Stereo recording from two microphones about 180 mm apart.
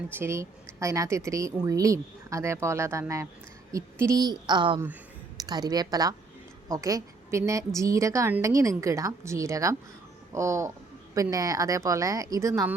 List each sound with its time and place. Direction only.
0.1 s a woman's voice: 15° right (ahead or behind)